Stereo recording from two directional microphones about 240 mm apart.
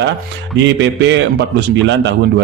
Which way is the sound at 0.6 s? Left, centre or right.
Right.